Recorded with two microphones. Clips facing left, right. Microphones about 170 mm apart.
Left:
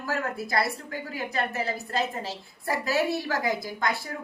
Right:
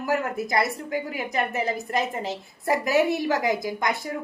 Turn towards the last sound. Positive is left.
turn(degrees=-20)  # may be behind; listen again after turning